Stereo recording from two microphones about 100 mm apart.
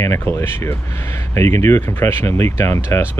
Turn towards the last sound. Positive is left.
turn(degrees=30)  # may be behind; listen again after turning